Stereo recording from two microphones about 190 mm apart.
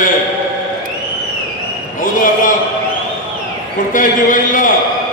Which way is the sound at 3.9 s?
45° left (ahead or behind).